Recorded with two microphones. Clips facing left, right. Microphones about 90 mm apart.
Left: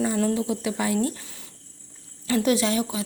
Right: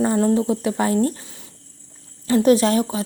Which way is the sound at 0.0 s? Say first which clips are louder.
Right 6 dB; 40° right (ahead or behind).